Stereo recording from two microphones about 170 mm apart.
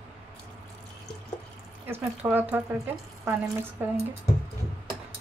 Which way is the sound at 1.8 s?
10° right (ahead or behind).